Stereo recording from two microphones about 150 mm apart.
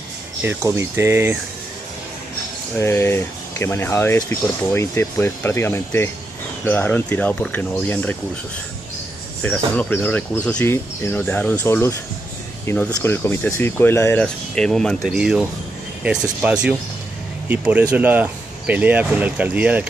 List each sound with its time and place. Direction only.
0.4 s speech: 15° right (ahead or behind)
2.8 s speech: 15° left (ahead or behind)
9.4 s speech: 10° left (ahead or behind)
14.2 s speech: 5° left (ahead or behind)